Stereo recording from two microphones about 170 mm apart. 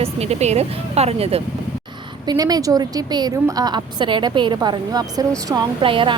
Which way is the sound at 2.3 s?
20° right (ahead or behind).